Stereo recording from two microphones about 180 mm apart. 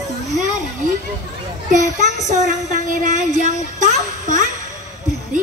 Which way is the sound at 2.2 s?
40° right (ahead or behind).